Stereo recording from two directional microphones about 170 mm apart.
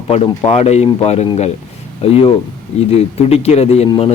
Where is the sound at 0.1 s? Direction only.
35° left (ahead or behind).